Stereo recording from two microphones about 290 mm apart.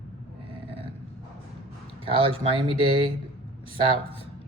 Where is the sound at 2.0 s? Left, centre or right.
Centre.